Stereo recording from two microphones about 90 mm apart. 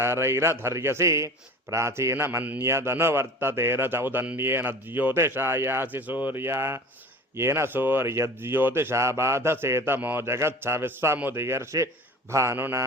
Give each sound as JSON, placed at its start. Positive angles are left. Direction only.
{"t": 0.0, "sound": "a man's voice", "side_deg": -30}